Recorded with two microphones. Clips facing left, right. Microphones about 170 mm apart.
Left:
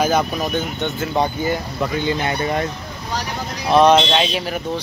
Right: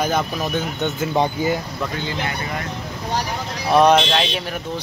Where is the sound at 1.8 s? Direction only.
20° left (ahead or behind).